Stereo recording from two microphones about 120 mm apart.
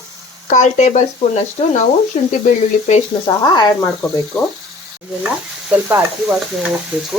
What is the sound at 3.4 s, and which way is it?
Speech, 35° left (ahead or behind).